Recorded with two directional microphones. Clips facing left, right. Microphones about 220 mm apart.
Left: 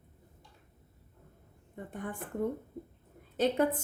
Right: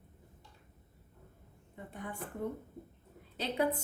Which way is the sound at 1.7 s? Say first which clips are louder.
Left 4 dB; 45° left (ahead or behind).